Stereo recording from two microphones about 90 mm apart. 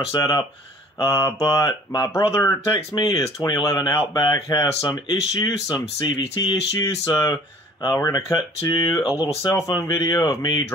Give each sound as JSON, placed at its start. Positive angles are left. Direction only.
{"t": 0.1, "sound": "speech", "side_deg": 45}
{"t": 0.9, "sound": "speech", "side_deg": 35}
{"t": 2.7, "sound": "speech", "side_deg": 45}
{"t": 6.7, "sound": "speech", "side_deg": 40}
{"t": 9.2, "sound": "speech", "side_deg": 65}
{"t": 9.5, "sound": "speech", "side_deg": 45}